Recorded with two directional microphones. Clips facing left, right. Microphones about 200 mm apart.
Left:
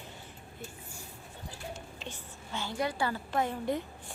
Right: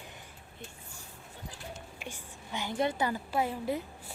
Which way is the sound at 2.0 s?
10° right (ahead or behind).